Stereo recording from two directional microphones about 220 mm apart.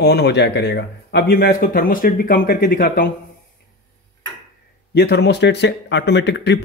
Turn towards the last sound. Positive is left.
turn(degrees=50)  # may be behind; listen again after turning